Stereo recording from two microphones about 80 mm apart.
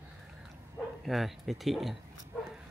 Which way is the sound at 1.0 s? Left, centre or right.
Centre.